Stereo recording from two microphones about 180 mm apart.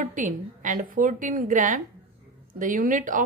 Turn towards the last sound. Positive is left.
turn(degrees=-45)  # may be behind; listen again after turning